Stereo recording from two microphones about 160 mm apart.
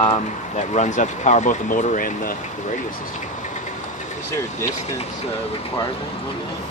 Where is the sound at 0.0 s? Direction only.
40° left (ahead or behind); by 2.3 s 60° left (ahead or behind).